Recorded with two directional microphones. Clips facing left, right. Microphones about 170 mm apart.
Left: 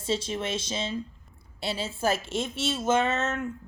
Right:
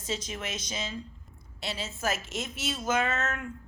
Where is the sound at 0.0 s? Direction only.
30° left (ahead or behind).